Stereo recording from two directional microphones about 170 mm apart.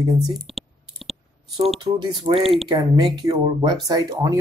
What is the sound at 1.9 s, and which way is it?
Speech, 25° right (ahead or behind).